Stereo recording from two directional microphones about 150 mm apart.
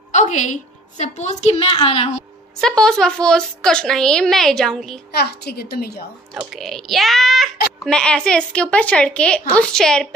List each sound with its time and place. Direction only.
0.1 s a woman's voice: 55° left (ahead or behind)
2.6 s a woman's voice: 5° left (ahead or behind)
5.1 s a woman's voice: 90° left
6.5 s a woman's voice: centre (ahead or behind)